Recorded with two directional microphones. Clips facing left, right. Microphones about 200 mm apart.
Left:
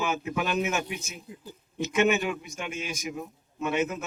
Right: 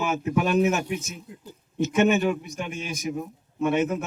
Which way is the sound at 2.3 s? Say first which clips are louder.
Right 4 dB; 35° right (ahead or behind).